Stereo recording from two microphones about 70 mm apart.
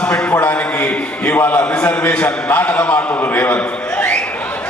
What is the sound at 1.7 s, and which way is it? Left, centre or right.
A man's voice, centre.